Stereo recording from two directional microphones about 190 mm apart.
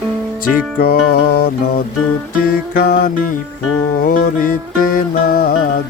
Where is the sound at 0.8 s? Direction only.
50° left (ahead or behind).